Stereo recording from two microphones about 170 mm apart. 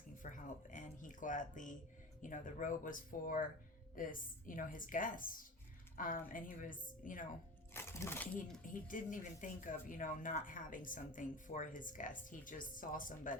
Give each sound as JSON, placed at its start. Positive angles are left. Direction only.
{"t": 0.2, "sound": "music", "side_deg": 50}
{"t": 2.2, "sound": "speech", "side_deg": 50}
{"t": 7.7, "sound": "speech", "side_deg": 15}
{"t": 8.6, "sound": "speech", "side_deg": 50}